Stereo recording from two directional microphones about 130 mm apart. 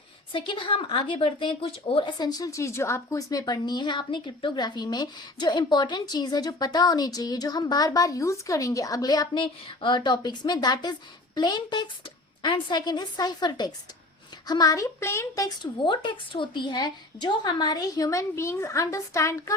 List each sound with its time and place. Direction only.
0.3 s a woman's voice: 40° left (ahead or behind); by 19.5 s 25° left (ahead or behind)